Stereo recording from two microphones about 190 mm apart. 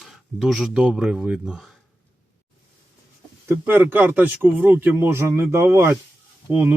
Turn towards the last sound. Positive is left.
turn(degrees=-10)  # may be behind; listen again after turning